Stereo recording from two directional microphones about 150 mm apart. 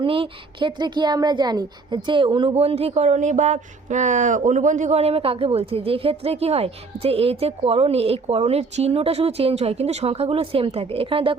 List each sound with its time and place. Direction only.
0.0 s a woman's voice: 35° right (ahead or behind)